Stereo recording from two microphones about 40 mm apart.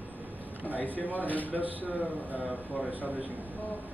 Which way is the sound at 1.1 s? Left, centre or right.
Left.